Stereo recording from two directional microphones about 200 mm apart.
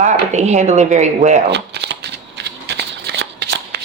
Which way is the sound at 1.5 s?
60° right (ahead or behind).